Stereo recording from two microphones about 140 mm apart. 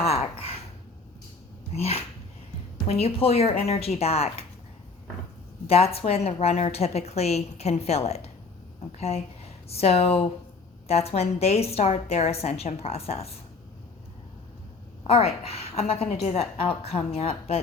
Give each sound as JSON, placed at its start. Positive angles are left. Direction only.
{"t": 0.0, "sound": "a sound", "side_deg": 45}
{"t": 1.7, "sound": "a woman's voice", "side_deg": 45}
{"t": 5.6, "sound": "a woman's voice", "side_deg": 45}
{"t": 15.0, "sound": "a woman's voice", "side_deg": 45}